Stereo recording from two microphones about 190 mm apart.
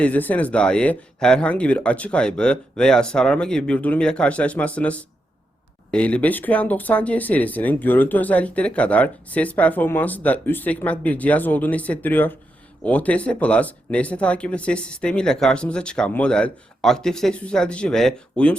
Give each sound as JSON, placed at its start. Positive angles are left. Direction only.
{"t": 0.0, "sound": "speech", "side_deg": 10}